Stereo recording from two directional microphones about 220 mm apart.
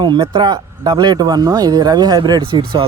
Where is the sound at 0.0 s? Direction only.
20° right (ahead or behind).